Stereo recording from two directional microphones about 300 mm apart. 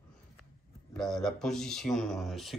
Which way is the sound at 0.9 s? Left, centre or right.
Centre.